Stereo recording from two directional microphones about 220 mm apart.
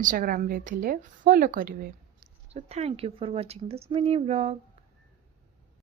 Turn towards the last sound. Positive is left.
turn(degrees=-30)  # may be behind; listen again after turning